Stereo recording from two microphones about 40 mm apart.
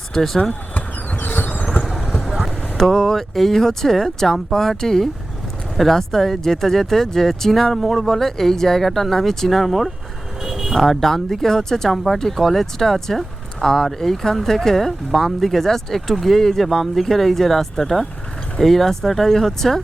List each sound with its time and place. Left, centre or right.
0.7 s a sound: left
1.8 s vehicle: centre
2.7 s speech: centre
10.4 s vehicle: centre
10.8 s speech: centre
11.9 s speech: centre